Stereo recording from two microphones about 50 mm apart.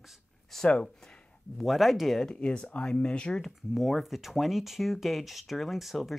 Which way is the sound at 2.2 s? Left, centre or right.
Left.